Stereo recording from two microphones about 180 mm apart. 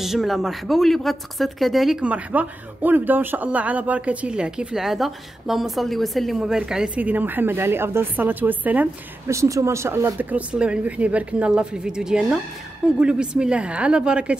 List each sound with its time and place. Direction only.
0.0 s speech: centre (ahead or behind)